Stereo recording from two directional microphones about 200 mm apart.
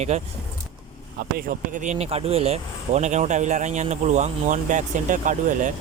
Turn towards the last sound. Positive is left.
turn(degrees=-40)  # may be behind; listen again after turning